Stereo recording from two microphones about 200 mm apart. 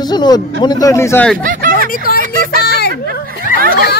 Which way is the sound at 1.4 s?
45° right (ahead or behind).